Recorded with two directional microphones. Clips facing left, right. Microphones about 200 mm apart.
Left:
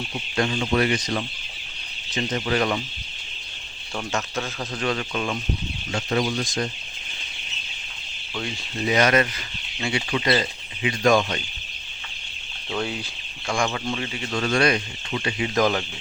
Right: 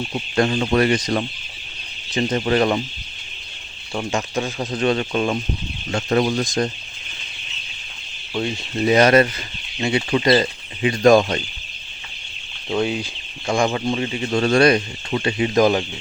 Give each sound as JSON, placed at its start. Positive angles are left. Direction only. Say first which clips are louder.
{"t": 0.1, "sound": "speech", "louder": "right 5 dB", "side_deg": -45}
{"t": 3.9, "sound": "speech", "louder": "right 5 dB", "side_deg": -15}
{"t": 5.9, "sound": "speech", "louder": "right 5 dB", "side_deg": -50}
{"t": 8.4, "sound": "speech", "louder": "right 7 dB", "side_deg": -35}
{"t": 12.6, "sound": "speech", "louder": "right 7 dB", "side_deg": -15}
{"t": 15.5, "sound": "speech", "louder": "right 5 dB", "side_deg": -20}